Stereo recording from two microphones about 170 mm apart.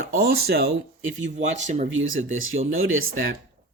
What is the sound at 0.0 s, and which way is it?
Speech, 65° right (ahead or behind).